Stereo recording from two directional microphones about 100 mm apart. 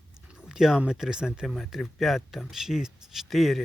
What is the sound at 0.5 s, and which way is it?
Speech, 5° right (ahead or behind).